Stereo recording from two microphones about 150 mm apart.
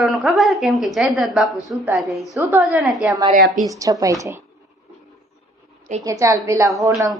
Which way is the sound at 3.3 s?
65° right (ahead or behind).